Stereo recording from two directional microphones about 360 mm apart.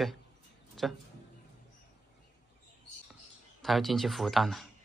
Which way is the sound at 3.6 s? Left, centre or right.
Centre.